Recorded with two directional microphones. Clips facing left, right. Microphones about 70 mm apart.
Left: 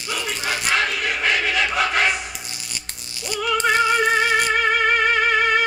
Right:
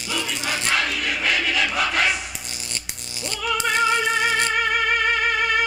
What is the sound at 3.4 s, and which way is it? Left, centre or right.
Music, left.